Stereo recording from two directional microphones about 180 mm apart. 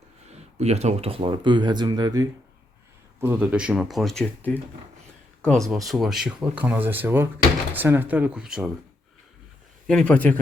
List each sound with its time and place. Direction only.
0.6 s speech: 35° right (ahead or behind); by 8.7 s 5° right (ahead or behind)
9.8 s speech: 5° left (ahead or behind)